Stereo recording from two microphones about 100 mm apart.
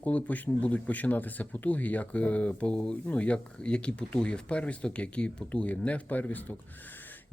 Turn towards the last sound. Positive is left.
turn(degrees=15)  # may be behind; listen again after turning